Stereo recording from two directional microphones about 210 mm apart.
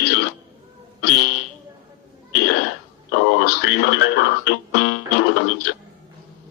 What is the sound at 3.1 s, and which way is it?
Radio, 50° left (ahead or behind).